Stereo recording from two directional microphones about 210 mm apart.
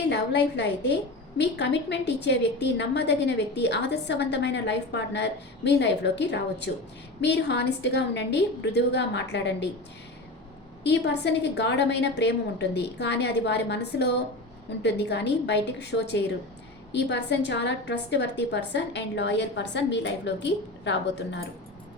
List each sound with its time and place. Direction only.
0.1 s a woman's voice: 55° left (ahead or behind)
10.8 s a woman's voice: 55° left (ahead or behind)